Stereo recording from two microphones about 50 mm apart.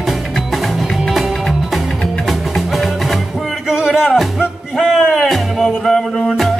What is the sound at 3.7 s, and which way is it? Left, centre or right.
Music, centre.